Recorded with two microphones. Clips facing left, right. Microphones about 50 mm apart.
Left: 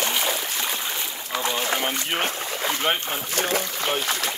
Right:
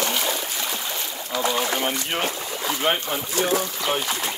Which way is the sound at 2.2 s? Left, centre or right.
Left.